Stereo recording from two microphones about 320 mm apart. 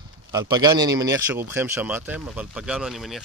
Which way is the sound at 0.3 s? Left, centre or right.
Centre.